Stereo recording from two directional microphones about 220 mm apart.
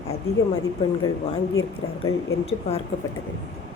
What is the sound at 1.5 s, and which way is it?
Speech, 65° left (ahead or behind).